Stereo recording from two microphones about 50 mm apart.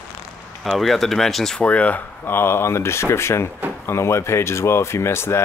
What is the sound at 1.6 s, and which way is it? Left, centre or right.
Speech, left.